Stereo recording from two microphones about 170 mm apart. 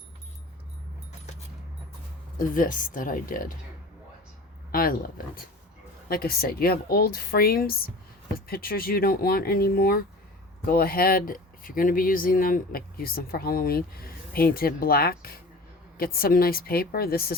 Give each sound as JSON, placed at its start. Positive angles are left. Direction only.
{"t": 2.4, "sound": "speech", "side_deg": 50}
{"t": 4.7, "sound": "speech", "side_deg": 60}